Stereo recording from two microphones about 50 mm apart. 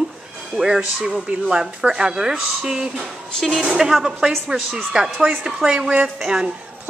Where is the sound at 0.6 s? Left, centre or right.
Centre.